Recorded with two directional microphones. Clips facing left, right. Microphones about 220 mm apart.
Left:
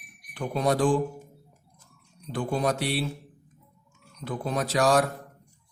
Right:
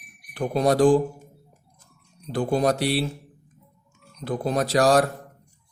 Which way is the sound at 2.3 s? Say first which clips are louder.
Right 5 dB; 40° right (ahead or behind).